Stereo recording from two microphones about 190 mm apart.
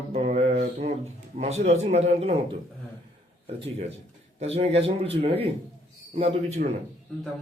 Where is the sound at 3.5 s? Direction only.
35° right (ahead or behind).